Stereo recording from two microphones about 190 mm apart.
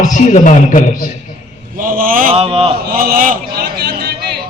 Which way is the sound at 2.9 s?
50° right (ahead or behind).